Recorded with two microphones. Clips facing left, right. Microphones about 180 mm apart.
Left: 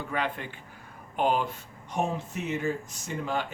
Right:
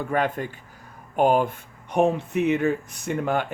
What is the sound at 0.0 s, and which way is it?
Speech, 50° right (ahead or behind).